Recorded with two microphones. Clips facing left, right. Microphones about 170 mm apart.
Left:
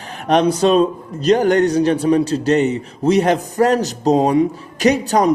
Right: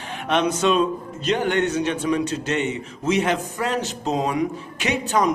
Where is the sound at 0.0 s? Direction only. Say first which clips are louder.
Left 6 dB; 40° left (ahead or behind).